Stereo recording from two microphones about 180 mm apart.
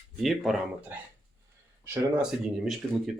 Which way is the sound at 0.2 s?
Centre (ahead or behind).